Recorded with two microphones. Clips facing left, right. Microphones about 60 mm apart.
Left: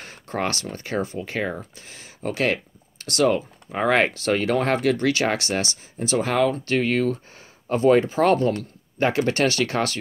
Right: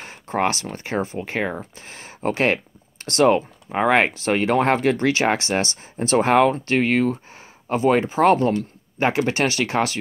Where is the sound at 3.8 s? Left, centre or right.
Centre.